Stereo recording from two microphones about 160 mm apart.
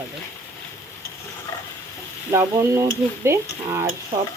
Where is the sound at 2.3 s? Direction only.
20° right (ahead or behind).